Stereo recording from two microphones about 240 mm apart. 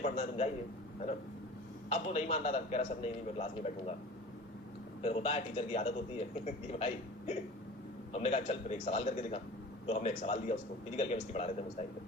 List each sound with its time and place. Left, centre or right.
0.0 s a man's voice: left
1.9 s a man's voice: left
5.0 s a man's voice: left